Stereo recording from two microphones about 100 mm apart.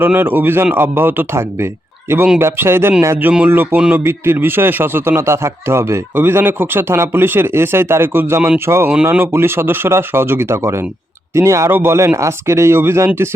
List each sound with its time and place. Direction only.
0.0 s speech: 20° right (ahead or behind)